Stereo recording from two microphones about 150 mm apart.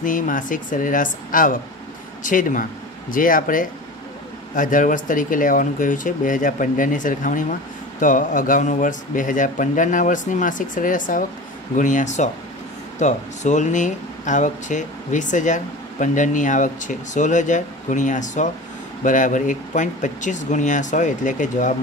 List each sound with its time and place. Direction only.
0.0 s speech: 60° left (ahead or behind)